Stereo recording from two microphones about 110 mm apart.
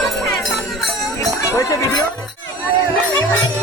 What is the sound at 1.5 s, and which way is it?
Speech, 30° left (ahead or behind).